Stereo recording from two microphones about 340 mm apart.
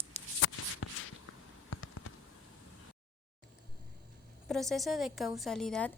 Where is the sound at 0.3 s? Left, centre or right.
Left.